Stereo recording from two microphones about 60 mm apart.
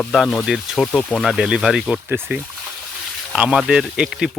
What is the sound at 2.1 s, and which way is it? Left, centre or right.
Speech, right.